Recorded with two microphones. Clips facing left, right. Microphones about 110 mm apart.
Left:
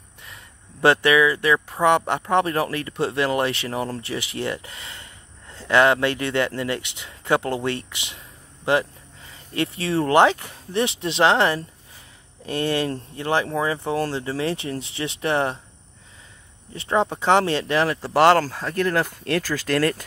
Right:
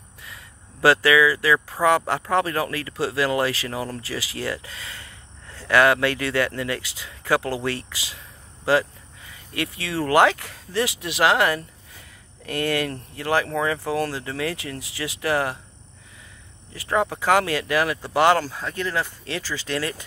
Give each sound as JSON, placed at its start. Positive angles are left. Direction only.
{"t": 1.0, "sound": "speech", "side_deg": 25}
{"t": 16.7, "sound": "speech", "side_deg": 25}